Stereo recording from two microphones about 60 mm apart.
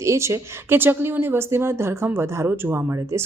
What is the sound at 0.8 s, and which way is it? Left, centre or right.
A woman's voice, right.